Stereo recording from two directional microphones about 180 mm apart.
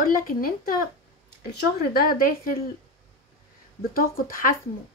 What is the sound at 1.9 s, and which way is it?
Speech, 55° left (ahead or behind).